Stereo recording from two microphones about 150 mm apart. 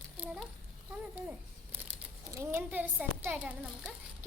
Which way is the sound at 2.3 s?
15° right (ahead or behind).